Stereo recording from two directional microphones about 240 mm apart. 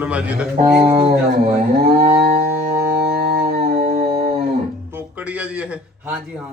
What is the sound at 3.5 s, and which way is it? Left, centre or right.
Howl, right.